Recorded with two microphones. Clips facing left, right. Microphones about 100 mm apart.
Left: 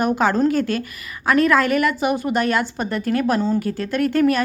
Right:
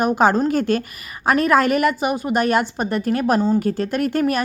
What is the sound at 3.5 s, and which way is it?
Speech, 35° right (ahead or behind).